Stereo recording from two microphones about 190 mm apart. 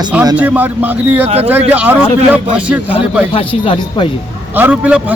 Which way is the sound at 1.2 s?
30° right (ahead or behind).